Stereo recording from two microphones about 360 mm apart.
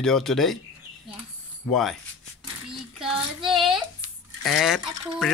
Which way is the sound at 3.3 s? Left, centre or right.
Centre.